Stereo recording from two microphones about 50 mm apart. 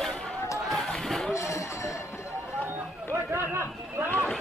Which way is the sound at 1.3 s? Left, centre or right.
Left.